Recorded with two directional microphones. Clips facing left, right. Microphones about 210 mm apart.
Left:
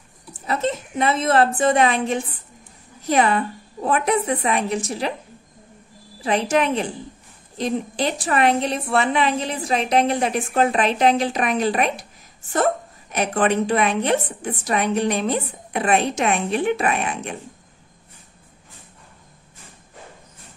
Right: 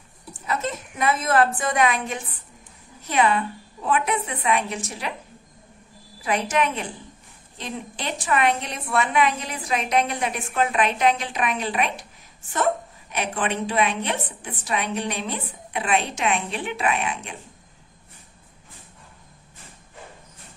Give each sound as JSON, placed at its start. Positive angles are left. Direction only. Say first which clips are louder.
{"t": 0.5, "sound": "a woman's voice", "louder": "left 4 dB", "side_deg": 30}
{"t": 6.2, "sound": "a woman's voice", "louder": "left 4 dB", "side_deg": 30}
{"t": 13.1, "sound": "a woman's voice", "louder": "left 6 dB", "side_deg": 45}